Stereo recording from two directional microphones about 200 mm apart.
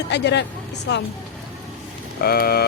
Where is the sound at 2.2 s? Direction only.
50° left (ahead or behind).